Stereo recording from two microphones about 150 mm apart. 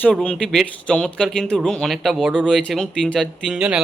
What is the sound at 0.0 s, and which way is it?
A man's voice, 5° left (ahead or behind).